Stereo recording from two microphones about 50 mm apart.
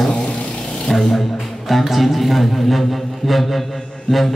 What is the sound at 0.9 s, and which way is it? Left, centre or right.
A man's voice, centre.